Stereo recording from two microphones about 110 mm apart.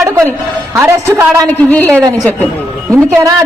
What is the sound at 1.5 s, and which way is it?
A woman's voice, 10° left (ahead or behind).